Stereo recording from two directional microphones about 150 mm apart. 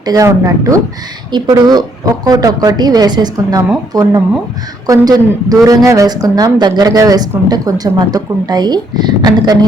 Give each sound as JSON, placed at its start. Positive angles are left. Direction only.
{"t": 0.0, "sound": "speech", "side_deg": -25}